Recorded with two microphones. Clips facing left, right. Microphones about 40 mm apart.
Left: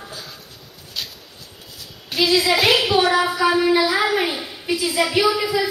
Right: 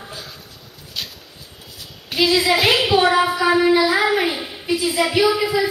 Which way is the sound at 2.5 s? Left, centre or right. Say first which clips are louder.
Even; centre.